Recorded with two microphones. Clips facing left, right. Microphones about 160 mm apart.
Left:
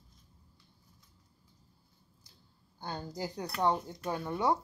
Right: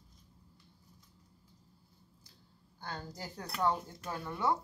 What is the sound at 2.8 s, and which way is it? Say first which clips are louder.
Speech: left 5 dB; 20° left (ahead or behind).